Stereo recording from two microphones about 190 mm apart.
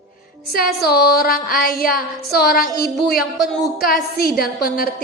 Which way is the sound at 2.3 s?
55° left (ahead or behind).